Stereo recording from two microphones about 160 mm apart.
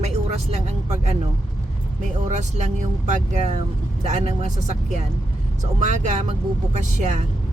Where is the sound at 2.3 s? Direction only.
45° right (ahead or behind).